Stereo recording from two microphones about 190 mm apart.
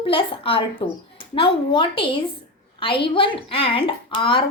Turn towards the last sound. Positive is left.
turn(degrees=25)  # may be behind; listen again after turning